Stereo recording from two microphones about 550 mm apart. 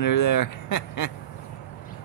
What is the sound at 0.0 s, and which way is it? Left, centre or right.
Speech, left.